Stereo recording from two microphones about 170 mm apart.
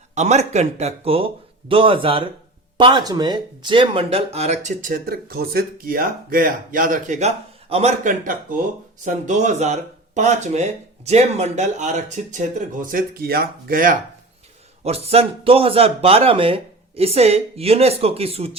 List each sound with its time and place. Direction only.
0.1 s speech: 40° right (ahead or behind)
14.8 s speech: 35° right (ahead or behind)